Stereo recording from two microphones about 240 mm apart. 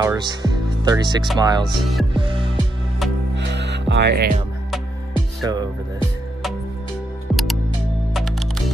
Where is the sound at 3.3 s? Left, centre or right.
Right.